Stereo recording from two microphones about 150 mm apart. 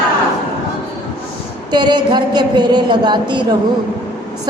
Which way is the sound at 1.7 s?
30° right (ahead or behind).